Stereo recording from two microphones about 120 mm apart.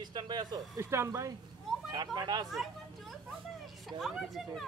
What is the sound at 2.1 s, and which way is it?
Speech, 35° right (ahead or behind).